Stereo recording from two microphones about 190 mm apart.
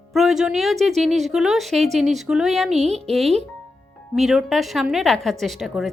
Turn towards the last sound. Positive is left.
turn(degrees=0)  # may be behind; listen again after turning